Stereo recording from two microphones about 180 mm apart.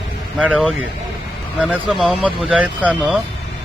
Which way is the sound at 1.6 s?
Centre (ahead or behind).